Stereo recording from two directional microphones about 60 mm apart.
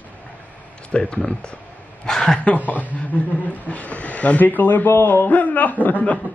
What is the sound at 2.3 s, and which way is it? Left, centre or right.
A woman's voice, left.